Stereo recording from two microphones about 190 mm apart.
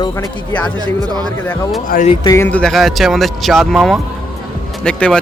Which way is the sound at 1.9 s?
45° left (ahead or behind).